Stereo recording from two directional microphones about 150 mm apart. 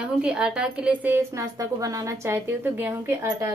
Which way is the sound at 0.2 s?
5° right (ahead or behind).